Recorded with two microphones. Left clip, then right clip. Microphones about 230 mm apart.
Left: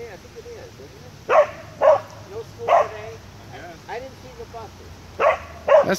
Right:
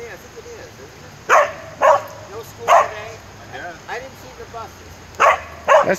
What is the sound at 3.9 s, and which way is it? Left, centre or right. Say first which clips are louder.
Vehicle: right 2 dB; right.